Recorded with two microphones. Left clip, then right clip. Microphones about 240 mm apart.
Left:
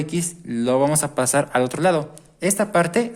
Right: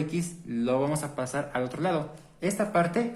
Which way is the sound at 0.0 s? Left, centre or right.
Left.